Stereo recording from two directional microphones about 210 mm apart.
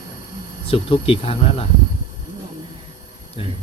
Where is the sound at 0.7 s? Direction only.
25° left (ahead or behind).